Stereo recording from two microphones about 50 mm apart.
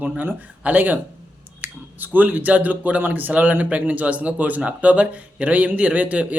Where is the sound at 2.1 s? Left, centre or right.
Right.